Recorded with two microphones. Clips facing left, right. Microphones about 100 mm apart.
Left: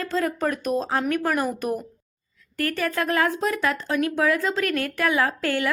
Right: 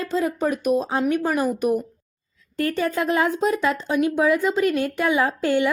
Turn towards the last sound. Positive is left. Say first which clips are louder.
# right 3 dB
turn(degrees=-20)  # may be behind; listen again after turning